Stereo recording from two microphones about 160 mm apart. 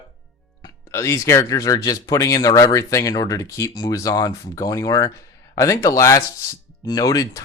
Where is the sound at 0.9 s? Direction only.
20° left (ahead or behind).